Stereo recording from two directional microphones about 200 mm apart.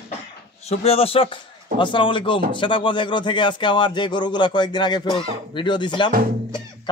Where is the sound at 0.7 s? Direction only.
30° left (ahead or behind).